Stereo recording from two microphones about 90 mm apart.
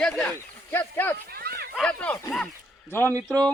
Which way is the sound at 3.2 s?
10° left (ahead or behind).